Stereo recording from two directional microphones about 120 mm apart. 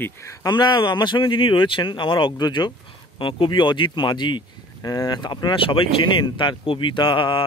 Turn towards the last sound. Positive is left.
turn(degrees=40)  # may be behind; listen again after turning